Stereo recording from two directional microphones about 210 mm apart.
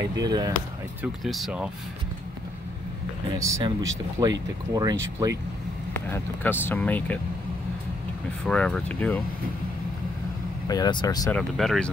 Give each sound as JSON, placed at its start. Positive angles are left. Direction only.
{"t": 0.1, "sound": "speech", "side_deg": -20}
{"t": 1.0, "sound": "speech", "side_deg": 0}
{"t": 3.3, "sound": "speech", "side_deg": -15}
{"t": 5.9, "sound": "speech", "side_deg": 10}
{"t": 8.5, "sound": "speech", "side_deg": 5}
{"t": 10.7, "sound": "speech", "side_deg": 20}
{"t": 11.3, "sound": "speech", "side_deg": 0}